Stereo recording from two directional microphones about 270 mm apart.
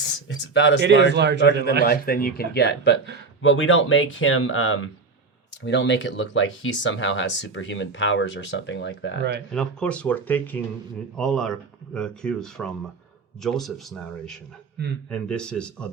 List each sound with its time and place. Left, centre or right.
0.0 s a sound: left
0.8 s speech: right
1.4 s speech: left
9.5 s speech: centre